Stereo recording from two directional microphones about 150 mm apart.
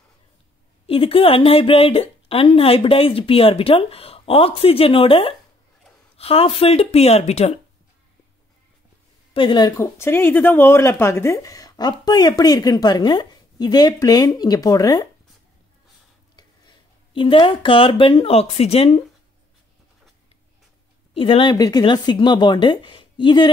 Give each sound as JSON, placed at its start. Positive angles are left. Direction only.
{"t": 0.8, "sound": "speech", "side_deg": 40}
{"t": 9.3, "sound": "speech", "side_deg": 35}
{"t": 17.1, "sound": "speech", "side_deg": 35}
{"t": 21.1, "sound": "speech", "side_deg": 35}